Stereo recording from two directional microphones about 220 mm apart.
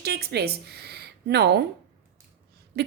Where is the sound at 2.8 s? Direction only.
45° right (ahead or behind).